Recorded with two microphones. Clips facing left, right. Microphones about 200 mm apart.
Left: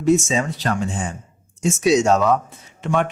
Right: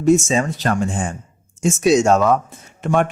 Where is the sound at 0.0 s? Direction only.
45° right (ahead or behind).